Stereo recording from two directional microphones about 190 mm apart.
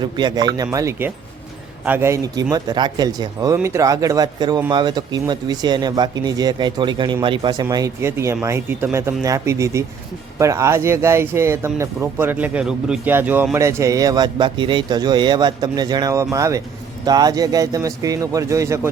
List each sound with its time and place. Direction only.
0.0 s speech: 20° right (ahead or behind)